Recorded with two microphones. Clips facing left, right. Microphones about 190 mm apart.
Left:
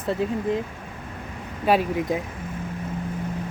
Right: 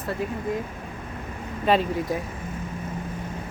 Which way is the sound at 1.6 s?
10° left (ahead or behind).